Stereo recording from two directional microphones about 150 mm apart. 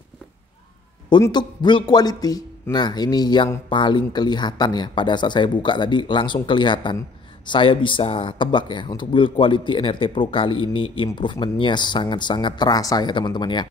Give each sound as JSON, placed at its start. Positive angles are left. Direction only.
{"t": 1.3, "sound": "a man's voice", "side_deg": 30}